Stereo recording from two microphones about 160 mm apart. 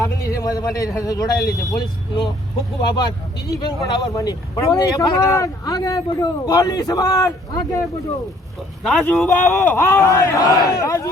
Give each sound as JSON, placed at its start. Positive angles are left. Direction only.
{"t": 0.0, "sound": "a sound", "side_deg": 20}
{"t": 1.0, "sound": "speech", "side_deg": 25}
{"t": 8.8, "sound": "a man's voice", "side_deg": 0}